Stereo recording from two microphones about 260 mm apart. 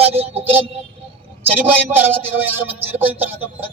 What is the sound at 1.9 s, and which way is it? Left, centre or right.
Speech, centre.